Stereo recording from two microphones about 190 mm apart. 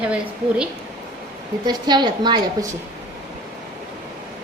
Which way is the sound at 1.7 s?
20° right (ahead or behind).